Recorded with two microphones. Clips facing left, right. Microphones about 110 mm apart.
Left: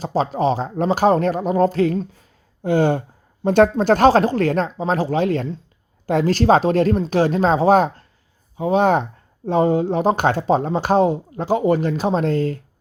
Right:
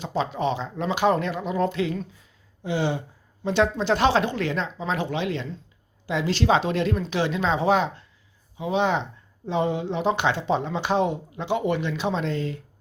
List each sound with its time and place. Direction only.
0.0 s speech: 40° left (ahead or behind)